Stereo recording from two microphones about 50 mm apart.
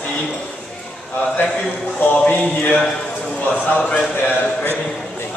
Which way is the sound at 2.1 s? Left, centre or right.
Left.